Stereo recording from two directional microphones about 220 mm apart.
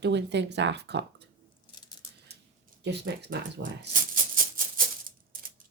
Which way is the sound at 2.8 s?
50° right (ahead or behind).